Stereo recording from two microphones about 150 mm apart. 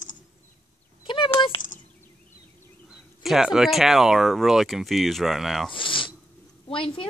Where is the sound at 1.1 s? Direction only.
35° left (ahead or behind).